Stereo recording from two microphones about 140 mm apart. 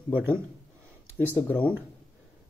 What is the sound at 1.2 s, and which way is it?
Speech, 15° left (ahead or behind).